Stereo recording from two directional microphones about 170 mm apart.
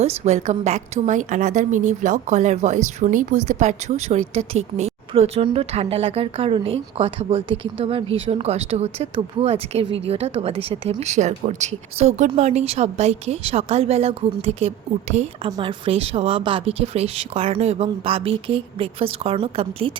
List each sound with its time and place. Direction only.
0.0 s a woman's voice: 40° right (ahead or behind)